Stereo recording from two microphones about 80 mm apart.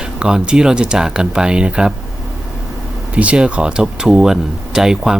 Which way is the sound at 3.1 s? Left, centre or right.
Centre.